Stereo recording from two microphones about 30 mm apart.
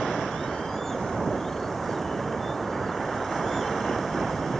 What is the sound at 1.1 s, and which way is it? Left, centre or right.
Vehicle, centre.